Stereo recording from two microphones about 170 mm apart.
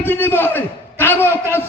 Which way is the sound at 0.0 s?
10° left (ahead or behind).